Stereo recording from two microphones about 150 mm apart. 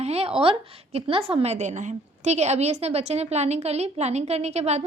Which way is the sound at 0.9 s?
40° right (ahead or behind).